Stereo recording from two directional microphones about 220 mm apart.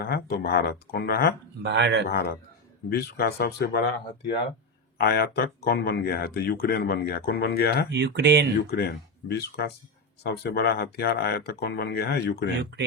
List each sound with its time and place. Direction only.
0.0 s speech: 45° left (ahead or behind)
1.6 s speech: 50° right (ahead or behind)
2.0 s speech: 45° left (ahead or behind)
4.9 s speech: 45° left (ahead or behind)
7.9 s speech: 50° right (ahead or behind)
8.6 s speech: 45° left (ahead or behind)